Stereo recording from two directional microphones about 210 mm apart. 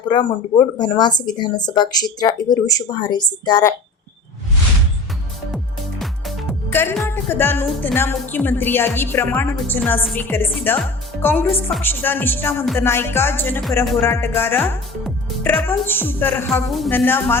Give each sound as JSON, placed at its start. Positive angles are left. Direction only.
{"t": 0.1, "sound": "speech", "side_deg": 20}
{"t": 6.0, "sound": "music", "side_deg": 0}
{"t": 6.7, "sound": "a woman's voice", "side_deg": 10}
{"t": 17.1, "sound": "a woman's voice", "side_deg": 10}